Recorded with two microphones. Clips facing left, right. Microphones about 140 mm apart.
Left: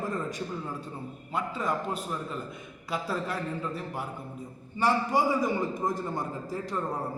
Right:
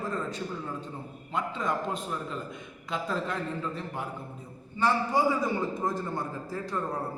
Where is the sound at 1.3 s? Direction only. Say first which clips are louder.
Even; 5° left (ahead or behind).